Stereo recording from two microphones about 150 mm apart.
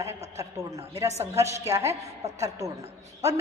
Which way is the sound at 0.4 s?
20° right (ahead or behind).